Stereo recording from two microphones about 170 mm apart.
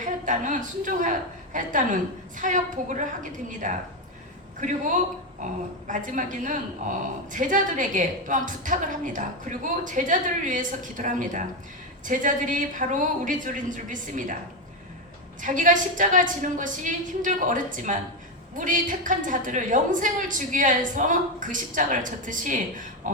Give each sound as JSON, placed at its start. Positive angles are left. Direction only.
{"t": 0.0, "sound": "a woman's voice", "side_deg": -50}
{"t": 5.9, "sound": "a woman's voice", "side_deg": -50}
{"t": 15.4, "sound": "a woman's voice", "side_deg": -50}